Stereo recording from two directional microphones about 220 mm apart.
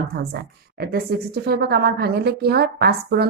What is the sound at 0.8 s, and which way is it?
Speech, 45° right (ahead or behind).